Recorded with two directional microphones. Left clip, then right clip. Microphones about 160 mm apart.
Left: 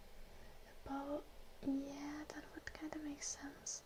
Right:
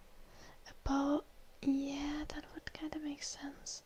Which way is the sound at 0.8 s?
40° right (ahead or behind).